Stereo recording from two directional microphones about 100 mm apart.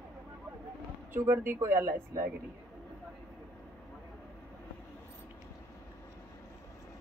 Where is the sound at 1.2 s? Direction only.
25° right (ahead or behind).